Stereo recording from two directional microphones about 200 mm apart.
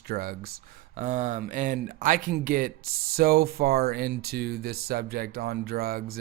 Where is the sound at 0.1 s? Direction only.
50° right (ahead or behind).